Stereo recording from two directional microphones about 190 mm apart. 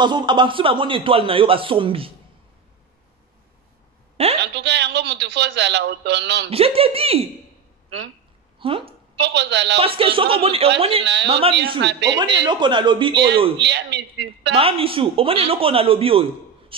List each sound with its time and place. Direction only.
0.0 s a man's voice: 25° right (ahead or behind)
4.4 s a sound: 65° right (ahead or behind)
6.5 s speech: 30° right (ahead or behind)
8.5 s speech: 25° right (ahead or behind)
9.2 s a man's voice: 65° right (ahead or behind)
9.8 s a man's voice: 30° right (ahead or behind)
11.8 s a man's voice: 65° right (ahead or behind)
12.4 s a man's voice: 25° right (ahead or behind)
13.6 s a man's voice: 65° right (ahead or behind)
14.5 s a man's voice: 30° right (ahead or behind)